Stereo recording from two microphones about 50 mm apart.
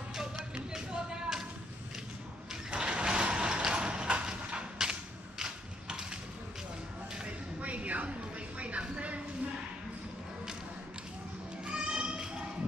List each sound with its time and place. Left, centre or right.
0.1 s music: centre
2.7 s mechanisms: centre
7.2 s a sound: right
11.6 s tap: centre